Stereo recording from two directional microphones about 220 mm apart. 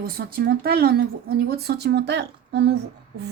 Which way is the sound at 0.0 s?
45° right (ahead or behind).